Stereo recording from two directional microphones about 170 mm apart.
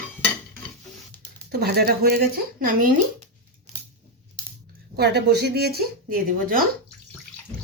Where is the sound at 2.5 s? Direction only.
55° right (ahead or behind).